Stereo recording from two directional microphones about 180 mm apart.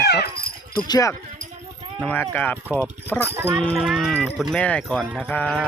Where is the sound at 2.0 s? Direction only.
10° left (ahead or behind).